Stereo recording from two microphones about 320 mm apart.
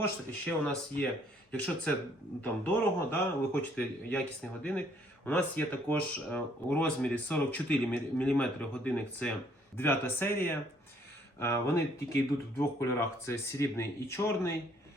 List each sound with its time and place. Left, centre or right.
0.0 s speech: centre
5.2 s speech: centre